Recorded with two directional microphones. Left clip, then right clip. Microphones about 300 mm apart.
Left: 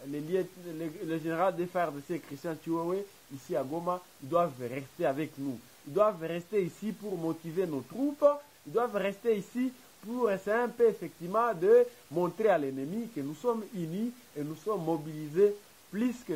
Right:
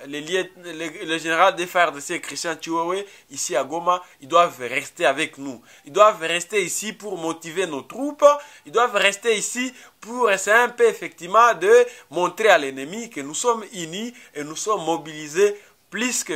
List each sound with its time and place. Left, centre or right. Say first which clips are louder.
0.1 s a man's voice: right 8 dB; centre
7.1 s speech: right 7 dB; right
7.4 s a man's voice: right 8 dB; centre
7.7 s a man's voice: right 6 dB; centre
14.5 s speech: right 10 dB; right
15.3 s a man's voice: right 7 dB; centre